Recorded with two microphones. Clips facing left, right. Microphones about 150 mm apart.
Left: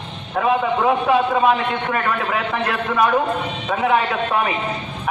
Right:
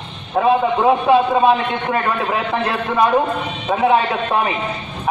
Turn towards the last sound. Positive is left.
turn(degrees=-25)  # may be behind; listen again after turning